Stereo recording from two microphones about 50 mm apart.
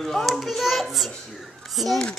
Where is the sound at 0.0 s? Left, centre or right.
Centre.